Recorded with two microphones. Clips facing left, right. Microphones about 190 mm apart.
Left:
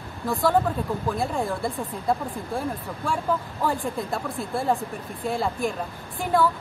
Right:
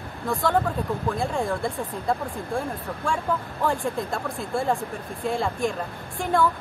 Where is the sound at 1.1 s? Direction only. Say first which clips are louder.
Right 1 dB; 5° left (ahead or behind).